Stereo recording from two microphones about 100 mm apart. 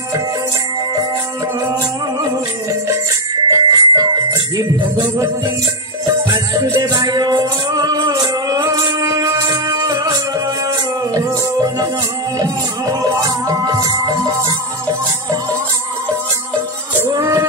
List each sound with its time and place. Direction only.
1.6 s music: 35° right (ahead or behind)
3.4 s music: 40° right (ahead or behind)
6.8 s music: 40° right (ahead or behind)
17.1 s music: 30° right (ahead or behind)